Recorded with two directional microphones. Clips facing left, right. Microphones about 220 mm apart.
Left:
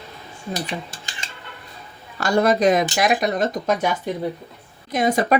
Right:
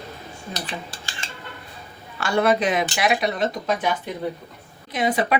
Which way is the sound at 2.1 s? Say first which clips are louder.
Left 2 dB; 40° left (ahead or behind).